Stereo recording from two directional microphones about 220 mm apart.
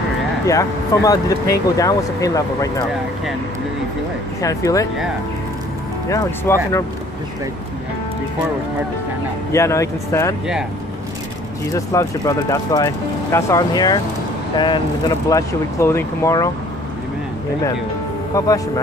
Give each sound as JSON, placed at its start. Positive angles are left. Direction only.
{"t": 0.5, "sound": "speech", "side_deg": 15}
{"t": 4.4, "sound": "speech", "side_deg": 15}
{"t": 6.0, "sound": "speech", "side_deg": 15}
{"t": 9.5, "sound": "speech", "side_deg": 15}
{"t": 11.7, "sound": "speech", "side_deg": 15}